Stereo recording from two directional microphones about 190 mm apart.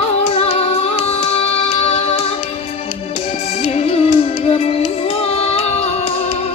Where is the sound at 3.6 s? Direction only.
30° left (ahead or behind).